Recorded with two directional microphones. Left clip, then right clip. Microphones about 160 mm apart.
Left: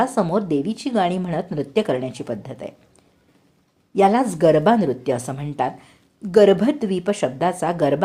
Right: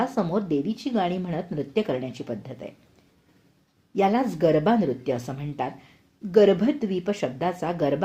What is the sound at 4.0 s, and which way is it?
A woman's voice, 25° left (ahead or behind).